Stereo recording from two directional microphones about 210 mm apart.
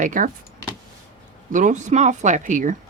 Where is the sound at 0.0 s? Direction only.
40° right (ahead or behind).